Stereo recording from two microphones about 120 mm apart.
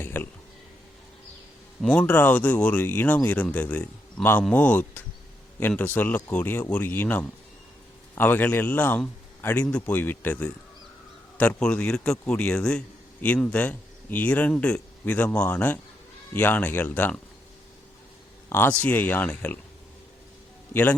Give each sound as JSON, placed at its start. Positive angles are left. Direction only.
{"t": 0.0, "sound": "a sound", "side_deg": 15}
{"t": 1.8, "sound": "a man's voice", "side_deg": 10}
{"t": 18.4, "sound": "speech", "side_deg": 15}